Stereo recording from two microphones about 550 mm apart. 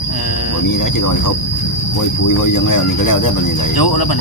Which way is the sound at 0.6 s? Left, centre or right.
Left.